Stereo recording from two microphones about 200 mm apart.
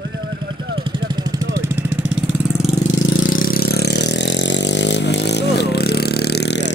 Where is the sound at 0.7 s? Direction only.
20° right (ahead or behind).